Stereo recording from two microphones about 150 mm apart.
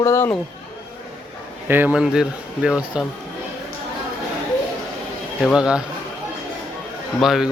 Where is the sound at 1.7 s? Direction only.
10° right (ahead or behind).